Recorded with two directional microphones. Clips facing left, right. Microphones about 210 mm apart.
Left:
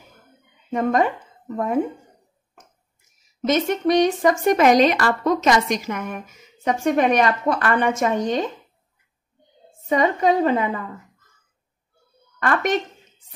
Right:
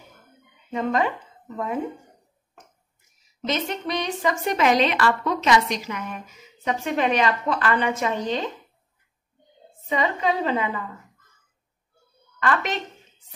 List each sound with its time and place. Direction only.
0.7 s speech: 50° left (ahead or behind)
3.4 s a woman's voice: 45° left (ahead or behind)
9.8 s a woman's voice: 50° left (ahead or behind)
12.4 s a woman's voice: 50° left (ahead or behind)